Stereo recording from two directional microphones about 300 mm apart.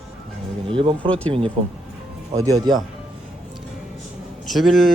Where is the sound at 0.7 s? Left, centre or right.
Centre.